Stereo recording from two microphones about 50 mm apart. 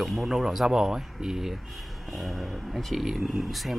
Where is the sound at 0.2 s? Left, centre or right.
Centre.